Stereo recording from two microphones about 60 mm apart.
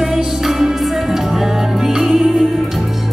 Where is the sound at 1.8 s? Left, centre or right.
Centre.